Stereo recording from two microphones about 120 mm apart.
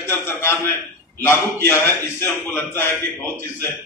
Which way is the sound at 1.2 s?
20° left (ahead or behind).